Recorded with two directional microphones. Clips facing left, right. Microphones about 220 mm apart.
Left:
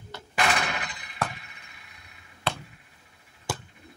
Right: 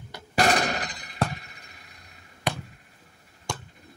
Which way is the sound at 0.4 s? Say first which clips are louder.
Right 4 dB; 40° right (ahead or behind).